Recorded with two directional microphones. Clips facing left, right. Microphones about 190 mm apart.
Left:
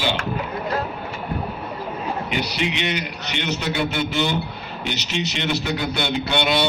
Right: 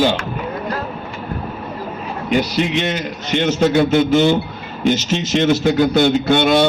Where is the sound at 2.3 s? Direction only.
45° right (ahead or behind).